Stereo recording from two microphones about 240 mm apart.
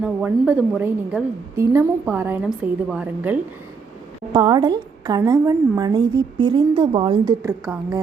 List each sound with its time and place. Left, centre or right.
0.0 s a woman's voice: centre
4.3 s a woman's voice: centre